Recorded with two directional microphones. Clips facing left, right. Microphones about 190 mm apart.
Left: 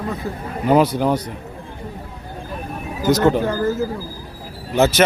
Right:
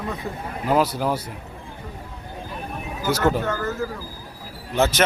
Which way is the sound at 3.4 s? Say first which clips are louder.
Left 6 dB; 30° left (ahead or behind).